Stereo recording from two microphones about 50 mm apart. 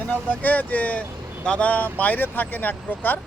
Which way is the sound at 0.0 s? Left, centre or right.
Left.